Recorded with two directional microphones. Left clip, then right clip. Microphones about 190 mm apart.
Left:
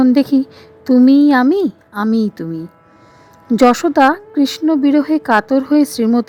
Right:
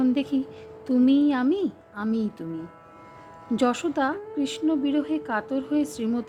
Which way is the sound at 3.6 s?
45° left (ahead or behind).